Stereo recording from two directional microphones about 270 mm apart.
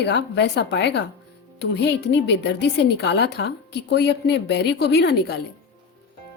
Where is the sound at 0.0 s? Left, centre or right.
Left.